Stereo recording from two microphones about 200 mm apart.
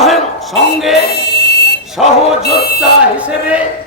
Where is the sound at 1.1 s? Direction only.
55° left (ahead or behind).